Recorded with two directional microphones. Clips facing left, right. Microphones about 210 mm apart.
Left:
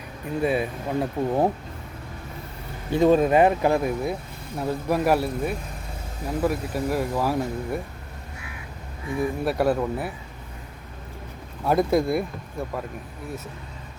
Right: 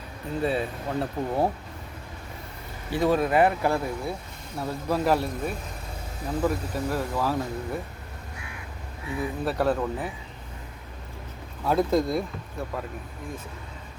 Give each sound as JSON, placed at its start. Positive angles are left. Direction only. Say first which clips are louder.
{"t": 0.4, "sound": "speech", "louder": "left 3 dB", "side_deg": 15}
{"t": 2.9, "sound": "speech", "louder": "left 5 dB", "side_deg": 20}
{"t": 9.0, "sound": "speech", "louder": "left 4 dB", "side_deg": 15}
{"t": 11.6, "sound": "speech", "louder": "left 2 dB", "side_deg": 10}